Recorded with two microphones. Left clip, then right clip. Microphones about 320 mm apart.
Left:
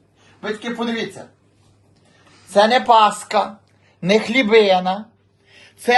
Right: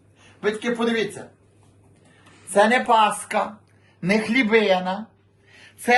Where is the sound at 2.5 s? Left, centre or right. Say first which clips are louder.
Left 4 dB; left.